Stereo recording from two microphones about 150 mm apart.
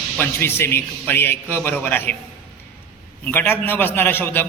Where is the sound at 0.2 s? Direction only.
15° left (ahead or behind).